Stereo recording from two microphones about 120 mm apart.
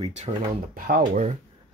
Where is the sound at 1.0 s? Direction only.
85° right.